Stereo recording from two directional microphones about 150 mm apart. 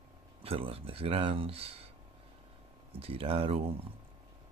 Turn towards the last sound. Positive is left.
turn(degrees=-40)  # may be behind; listen again after turning